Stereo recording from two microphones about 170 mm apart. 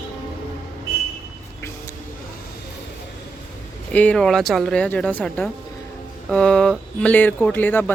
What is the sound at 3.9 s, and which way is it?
Speech, 10° left (ahead or behind).